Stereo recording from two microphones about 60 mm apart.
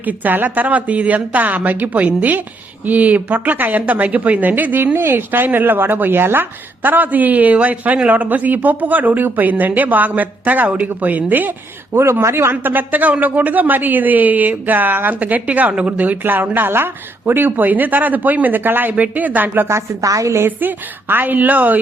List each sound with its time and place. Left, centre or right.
0.0 s speech: right
12.2 s speech: right
19.6 s a woman's voice: right
20.1 s a woman's voice: right
20.4 s a woman's voice: right